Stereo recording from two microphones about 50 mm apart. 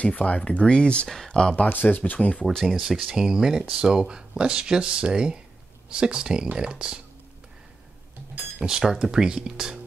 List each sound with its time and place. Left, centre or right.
0.0 s speech: left
1.0 s speech: centre
1.6 s speech: left
2.4 s speech: centre
3.1 s speech: centre
8.6 s speech: centre